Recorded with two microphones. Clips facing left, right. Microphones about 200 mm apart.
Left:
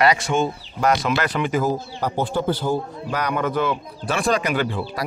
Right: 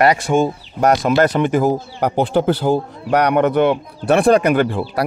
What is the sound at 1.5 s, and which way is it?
A man's voice, 65° right (ahead or behind).